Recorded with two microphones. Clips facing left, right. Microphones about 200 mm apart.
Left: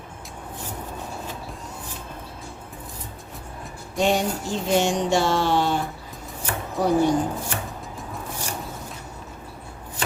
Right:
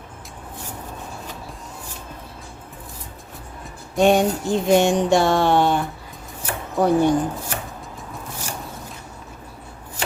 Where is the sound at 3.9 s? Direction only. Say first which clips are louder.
Right 6 dB; 55° right (ahead or behind).